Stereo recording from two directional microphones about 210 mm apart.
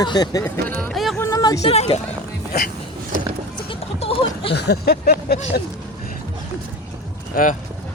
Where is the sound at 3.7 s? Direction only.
25° left (ahead or behind).